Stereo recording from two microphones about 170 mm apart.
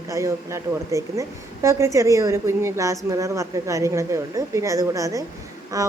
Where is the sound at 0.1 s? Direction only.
20° right (ahead or behind).